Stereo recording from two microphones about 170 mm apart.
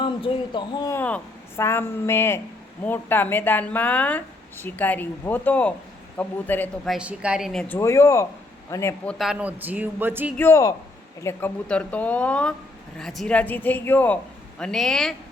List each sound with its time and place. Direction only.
0.0 s speech: 30° left (ahead or behind)
0.9 s speech: 10° left (ahead or behind)
6.8 s speech: 5° right (ahead or behind)
7.8 s speech: 15° left (ahead or behind)
9.0 s speech: centre (ahead or behind)
10.3 s speech: 15° left (ahead or behind)